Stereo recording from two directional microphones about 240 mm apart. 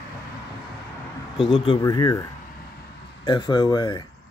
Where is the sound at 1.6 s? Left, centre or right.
Centre.